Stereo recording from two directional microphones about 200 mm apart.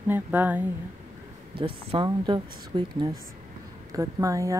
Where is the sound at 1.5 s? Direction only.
25° right (ahead or behind).